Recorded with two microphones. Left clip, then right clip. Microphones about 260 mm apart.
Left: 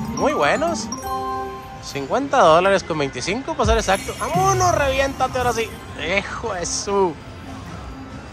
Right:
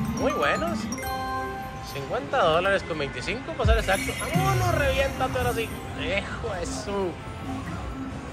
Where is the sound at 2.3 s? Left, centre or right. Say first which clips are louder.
Left 8 dB; left.